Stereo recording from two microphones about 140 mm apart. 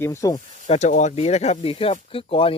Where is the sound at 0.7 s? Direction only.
55° left (ahead or behind); by 2.5 s 40° left (ahead or behind).